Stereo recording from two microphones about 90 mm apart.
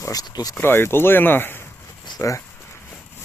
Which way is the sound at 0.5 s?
25° left (ahead or behind).